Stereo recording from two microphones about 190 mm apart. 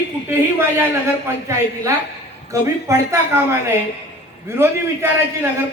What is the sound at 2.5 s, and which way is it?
Speech, 15° right (ahead or behind).